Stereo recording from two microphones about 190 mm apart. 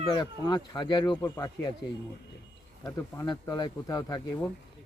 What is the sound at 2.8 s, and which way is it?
Speech, 20° left (ahead or behind).